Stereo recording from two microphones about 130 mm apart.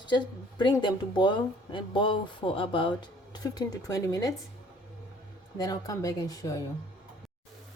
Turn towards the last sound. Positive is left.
turn(degrees=30)  # may be behind; listen again after turning